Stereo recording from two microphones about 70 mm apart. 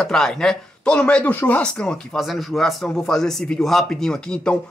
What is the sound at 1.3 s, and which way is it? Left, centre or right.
Speech, left.